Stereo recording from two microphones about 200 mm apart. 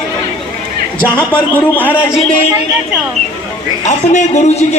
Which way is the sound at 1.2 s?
10° left (ahead or behind).